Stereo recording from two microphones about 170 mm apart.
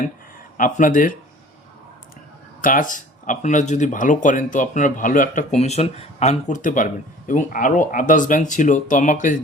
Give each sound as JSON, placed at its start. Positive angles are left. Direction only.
{"t": 0.5, "sound": "speech", "side_deg": 50}
{"t": 2.6, "sound": "speech", "side_deg": 55}